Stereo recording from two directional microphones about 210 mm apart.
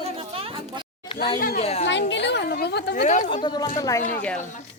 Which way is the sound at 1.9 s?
60° left (ahead or behind).